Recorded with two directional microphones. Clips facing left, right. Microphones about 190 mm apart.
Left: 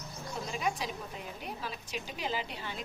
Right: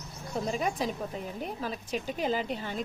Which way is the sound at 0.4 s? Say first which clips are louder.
Right 4 dB; 45° right (ahead or behind).